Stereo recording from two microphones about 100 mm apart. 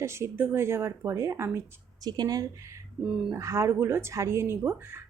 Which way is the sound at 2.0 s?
40° right (ahead or behind).